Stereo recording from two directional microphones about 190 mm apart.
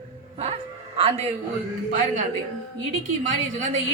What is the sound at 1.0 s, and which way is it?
Speech, 30° right (ahead or behind).